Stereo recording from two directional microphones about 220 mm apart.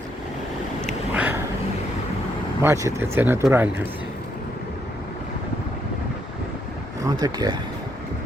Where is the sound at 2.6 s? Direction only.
15° right (ahead or behind).